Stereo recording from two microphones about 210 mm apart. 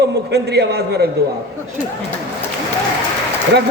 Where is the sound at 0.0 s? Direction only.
55° right (ahead or behind).